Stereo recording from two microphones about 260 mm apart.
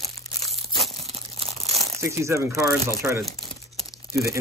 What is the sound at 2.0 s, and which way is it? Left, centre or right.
Speech, centre.